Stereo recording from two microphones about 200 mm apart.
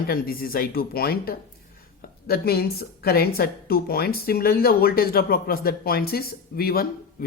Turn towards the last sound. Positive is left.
turn(degrees=50)  # may be behind; listen again after turning